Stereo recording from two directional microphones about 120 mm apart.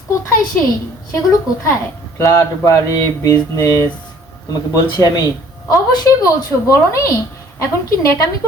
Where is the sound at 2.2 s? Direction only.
25° left (ahead or behind).